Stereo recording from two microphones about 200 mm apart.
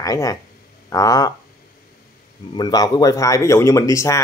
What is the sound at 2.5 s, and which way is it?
Speech, 20° left (ahead or behind).